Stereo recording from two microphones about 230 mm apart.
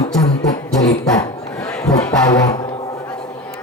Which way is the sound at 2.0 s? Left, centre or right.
Centre.